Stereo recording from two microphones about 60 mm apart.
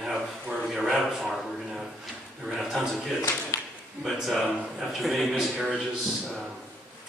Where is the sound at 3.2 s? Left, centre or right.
Left.